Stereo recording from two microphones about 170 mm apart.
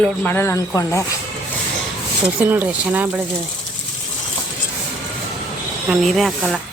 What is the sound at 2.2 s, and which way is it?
Speech, 10° right (ahead or behind).